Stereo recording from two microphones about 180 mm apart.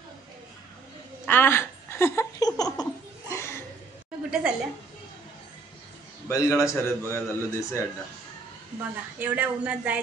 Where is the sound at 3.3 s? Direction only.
15° left (ahead or behind).